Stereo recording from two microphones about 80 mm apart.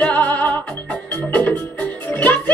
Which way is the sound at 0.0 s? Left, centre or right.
Left.